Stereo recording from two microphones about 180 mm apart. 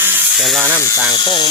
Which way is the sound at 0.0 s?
10° right (ahead or behind).